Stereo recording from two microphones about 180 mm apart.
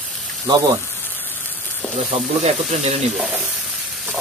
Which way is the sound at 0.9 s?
10° left (ahead or behind).